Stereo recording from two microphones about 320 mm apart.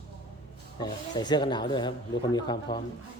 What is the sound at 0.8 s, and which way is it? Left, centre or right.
Speech, centre.